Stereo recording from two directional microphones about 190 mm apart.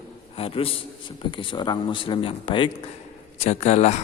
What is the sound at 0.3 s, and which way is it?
A man's voice, 30° left (ahead or behind).